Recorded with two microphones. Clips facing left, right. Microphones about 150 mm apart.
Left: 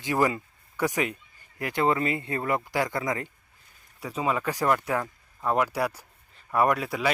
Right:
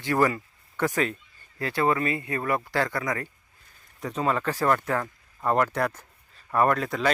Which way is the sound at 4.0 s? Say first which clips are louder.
Right 1 dB; 10° left (ahead or behind).